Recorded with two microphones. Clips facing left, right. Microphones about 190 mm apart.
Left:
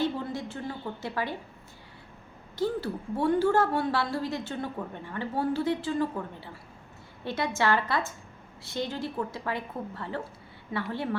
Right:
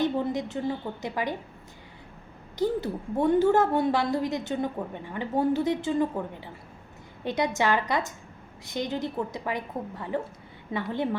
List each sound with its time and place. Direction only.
0.0 s a sound: 20° right (ahead or behind)
1.0 s a woman's voice: 15° right (ahead or behind)
2.6 s a woman's voice: 20° right (ahead or behind)